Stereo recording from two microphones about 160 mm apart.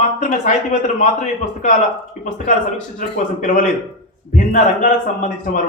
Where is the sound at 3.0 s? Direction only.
55° left (ahead or behind).